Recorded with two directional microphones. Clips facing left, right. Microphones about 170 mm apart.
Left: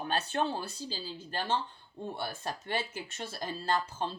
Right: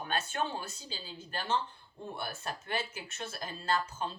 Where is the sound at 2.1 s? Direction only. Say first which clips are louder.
Left 1 dB; 30° left (ahead or behind).